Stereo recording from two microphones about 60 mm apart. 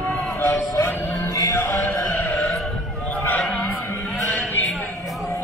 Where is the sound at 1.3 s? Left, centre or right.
Left.